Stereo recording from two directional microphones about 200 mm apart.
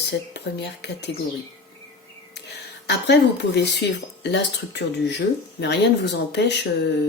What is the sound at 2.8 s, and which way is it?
Speech, 60° left (ahead or behind).